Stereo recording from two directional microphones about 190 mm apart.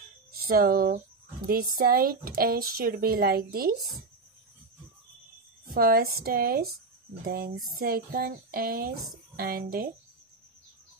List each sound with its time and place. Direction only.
0.4 s speech: 50° right (ahead or behind)
5.8 s speech: 50° right (ahead or behind)